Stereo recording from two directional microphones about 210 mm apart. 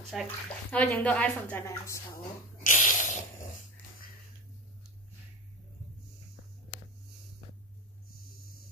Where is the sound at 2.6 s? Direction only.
35° left (ahead or behind).